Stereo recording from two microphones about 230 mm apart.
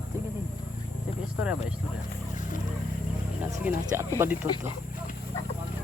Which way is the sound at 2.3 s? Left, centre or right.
Left.